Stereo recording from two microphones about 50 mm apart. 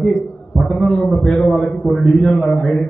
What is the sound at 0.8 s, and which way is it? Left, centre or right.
A man's voice, centre.